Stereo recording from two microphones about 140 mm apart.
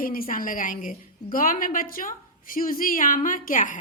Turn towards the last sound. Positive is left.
turn(degrees=75)  # may be behind; listen again after turning